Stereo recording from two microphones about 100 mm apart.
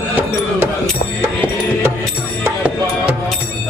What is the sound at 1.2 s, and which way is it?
Music, 25° right (ahead or behind).